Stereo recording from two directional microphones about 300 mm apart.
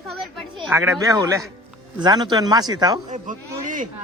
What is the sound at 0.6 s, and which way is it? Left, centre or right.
A man's voice, centre.